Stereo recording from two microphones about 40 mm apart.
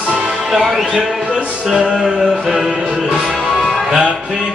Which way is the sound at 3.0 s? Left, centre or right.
Centre.